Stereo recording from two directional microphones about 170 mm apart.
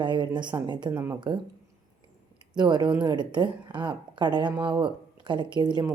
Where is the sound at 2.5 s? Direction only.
25° right (ahead or behind).